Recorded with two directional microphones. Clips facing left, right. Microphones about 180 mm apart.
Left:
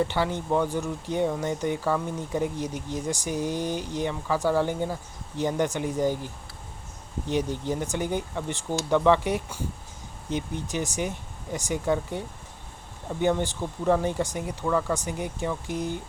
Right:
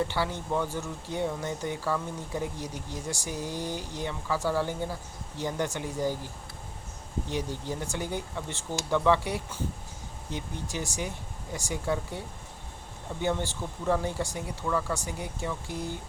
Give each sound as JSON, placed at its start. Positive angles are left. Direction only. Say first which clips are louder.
{"t": 0.1, "sound": "speech", "louder": "left 4 dB", "side_deg": 20}
{"t": 7.3, "sound": "speech", "louder": "left 7 dB", "side_deg": 20}
{"t": 13.2, "sound": "speech", "louder": "left 5 dB", "side_deg": 20}